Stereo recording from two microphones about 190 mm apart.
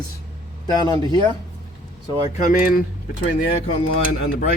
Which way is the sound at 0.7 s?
20° left (ahead or behind).